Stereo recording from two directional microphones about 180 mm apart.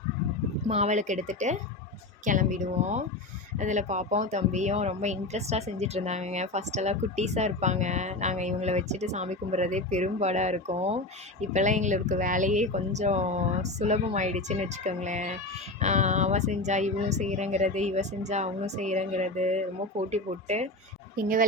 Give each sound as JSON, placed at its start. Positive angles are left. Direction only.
{"t": 0.7, "sound": "a woman's voice", "side_deg": -40}
{"t": 21.2, "sound": "a woman's voice", "side_deg": -50}